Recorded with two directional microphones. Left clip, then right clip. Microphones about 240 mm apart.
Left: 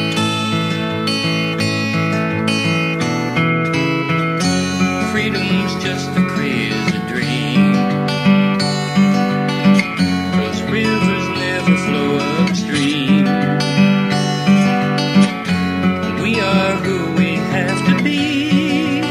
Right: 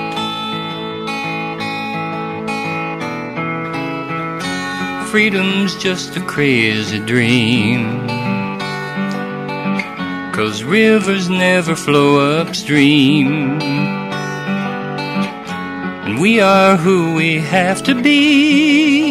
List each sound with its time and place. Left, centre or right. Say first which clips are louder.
5.1 s music: right 4 dB; right
6.4 s music: right 5 dB; right
10.7 s music: right 6 dB; right
16.3 s music: right 8 dB; right